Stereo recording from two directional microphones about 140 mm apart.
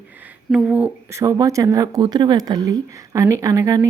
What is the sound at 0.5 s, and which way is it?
Speech, 5° right (ahead or behind).